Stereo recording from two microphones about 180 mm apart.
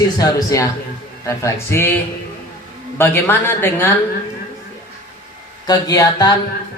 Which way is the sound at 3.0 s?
10° left (ahead or behind).